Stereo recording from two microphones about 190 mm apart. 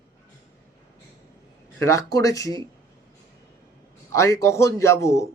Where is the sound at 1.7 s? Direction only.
15° left (ahead or behind).